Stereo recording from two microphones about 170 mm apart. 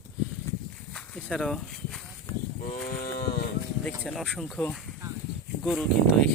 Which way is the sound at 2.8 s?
65° left (ahead or behind).